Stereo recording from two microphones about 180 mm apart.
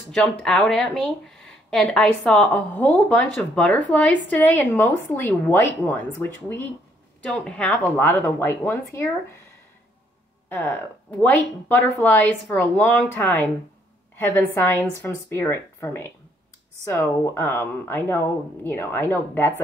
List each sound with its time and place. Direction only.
0.1 s a woman's voice: 5° left (ahead or behind)
10.6 s a woman's voice: 5° left (ahead or behind)